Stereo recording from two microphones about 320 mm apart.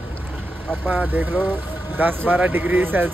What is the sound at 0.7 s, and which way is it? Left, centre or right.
Speech, centre.